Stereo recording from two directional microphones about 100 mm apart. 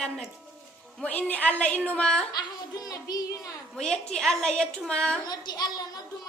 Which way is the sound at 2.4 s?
40° left (ahead or behind).